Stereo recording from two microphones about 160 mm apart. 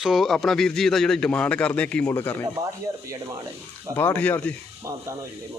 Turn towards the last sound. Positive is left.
turn(degrees=-15)  # may be behind; listen again after turning